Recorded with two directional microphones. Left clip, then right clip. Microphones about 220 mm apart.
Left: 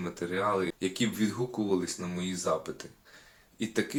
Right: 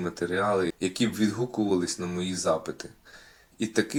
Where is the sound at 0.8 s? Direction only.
15° right (ahead or behind).